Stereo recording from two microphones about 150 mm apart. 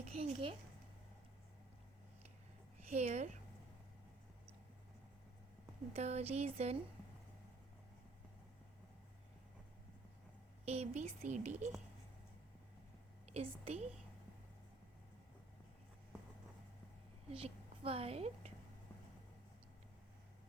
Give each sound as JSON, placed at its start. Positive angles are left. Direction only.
{"t": 0.0, "sound": "a woman's voice", "side_deg": -45}
{"t": 2.9, "sound": "speech", "side_deg": -45}
{"t": 5.9, "sound": "speech", "side_deg": -45}
{"t": 10.7, "sound": "speech", "side_deg": -45}
{"t": 13.3, "sound": "speech", "side_deg": -45}
{"t": 17.3, "sound": "a woman's voice", "side_deg": -40}